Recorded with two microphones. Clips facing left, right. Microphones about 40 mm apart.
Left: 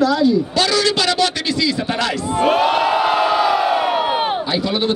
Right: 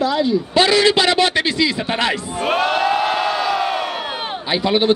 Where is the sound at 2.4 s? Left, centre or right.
Centre.